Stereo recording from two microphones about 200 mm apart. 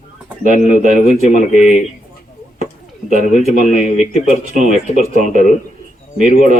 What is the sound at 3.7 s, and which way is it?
Speech, 40° right (ahead or behind).